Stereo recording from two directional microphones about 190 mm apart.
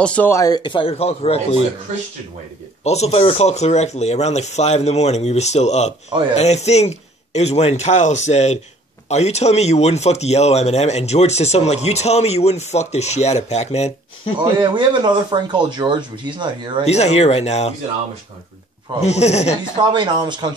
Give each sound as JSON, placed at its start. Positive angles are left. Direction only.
{"t": 0.0, "sound": "speech", "side_deg": 10}
{"t": 2.8, "sound": "speech", "side_deg": 35}
{"t": 14.4, "sound": "speech", "side_deg": -25}
{"t": 16.8, "sound": "speech", "side_deg": 35}
{"t": 18.9, "sound": "speech", "side_deg": 35}
{"t": 19.8, "sound": "speech", "side_deg": -25}